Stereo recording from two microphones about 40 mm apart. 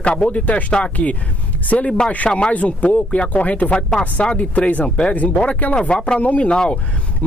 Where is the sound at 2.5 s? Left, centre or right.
Left.